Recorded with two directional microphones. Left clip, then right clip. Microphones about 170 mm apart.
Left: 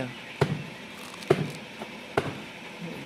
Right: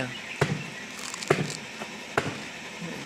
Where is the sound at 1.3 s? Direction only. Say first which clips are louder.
Left 1 dB; 90° left.